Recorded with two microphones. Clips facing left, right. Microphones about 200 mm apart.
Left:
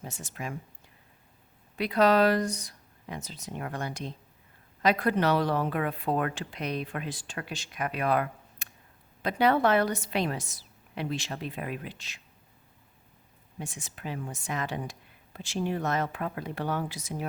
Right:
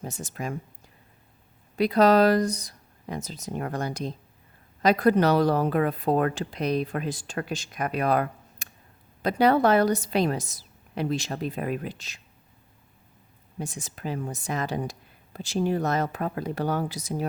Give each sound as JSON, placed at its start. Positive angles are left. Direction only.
{"t": 0.0, "sound": "speech", "side_deg": -40}
{"t": 1.8, "sound": "speech", "side_deg": -40}
{"t": 13.6, "sound": "speech", "side_deg": -40}